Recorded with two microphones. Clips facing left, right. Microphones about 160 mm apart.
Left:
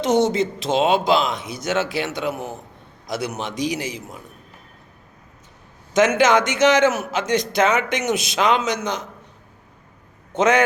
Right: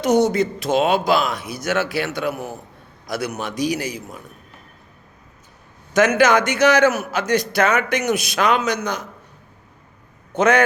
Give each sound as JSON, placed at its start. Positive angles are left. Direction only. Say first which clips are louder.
{"t": 0.0, "sound": "a man's voice", "louder": "right 1 dB", "side_deg": 25}
{"t": 5.9, "sound": "a man's voice", "louder": "right 1 dB", "side_deg": 20}
{"t": 10.3, "sound": "a man's voice", "louder": "right 1 dB", "side_deg": 20}